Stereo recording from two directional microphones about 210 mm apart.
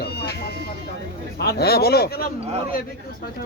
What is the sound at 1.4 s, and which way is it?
Speech, 50° left (ahead or behind).